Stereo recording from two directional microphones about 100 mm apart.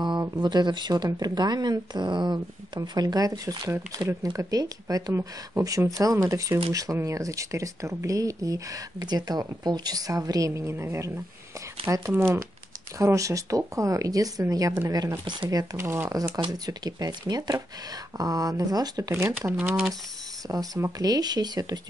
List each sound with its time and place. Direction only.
0.4 s speech: 45° right (ahead or behind)
16.3 s speech: 45° right (ahead or behind)
19.1 s speech: 25° right (ahead or behind)